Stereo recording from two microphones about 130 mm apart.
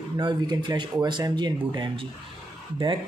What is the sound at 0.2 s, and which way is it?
Speech, 40° right (ahead or behind).